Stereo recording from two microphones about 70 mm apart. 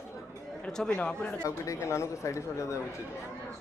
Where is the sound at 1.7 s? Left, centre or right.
Left.